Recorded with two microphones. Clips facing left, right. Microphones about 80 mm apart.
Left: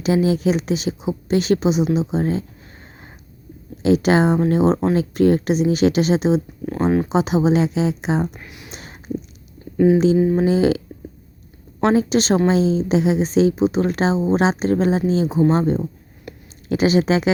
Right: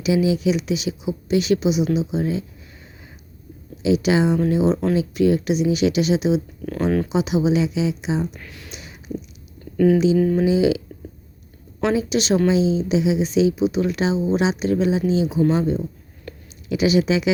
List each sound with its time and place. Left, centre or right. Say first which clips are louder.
0.0 s speech: left 1 dB; left
3.8 s speech: left 2 dB; left
6.7 s speech: left 2 dB; left
7.1 s speech: left 2 dB; left
8.4 s speech: left 1 dB; centre
8.7 s a sound: left 2 dB; left
9.7 s speech: left 2 dB; left
10.4 s speech: left 1 dB; left
11.8 s speech: left 4 dB; left
16.3 s a sound: even; centre
16.6 s speech: left 2 dB; left